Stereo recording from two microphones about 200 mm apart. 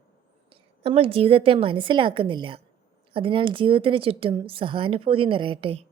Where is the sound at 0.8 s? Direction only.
30° right (ahead or behind).